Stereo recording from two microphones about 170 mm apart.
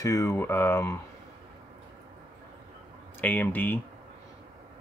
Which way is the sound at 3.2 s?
10° left (ahead or behind).